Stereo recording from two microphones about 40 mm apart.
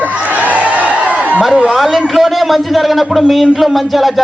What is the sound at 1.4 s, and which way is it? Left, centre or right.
Speech, centre.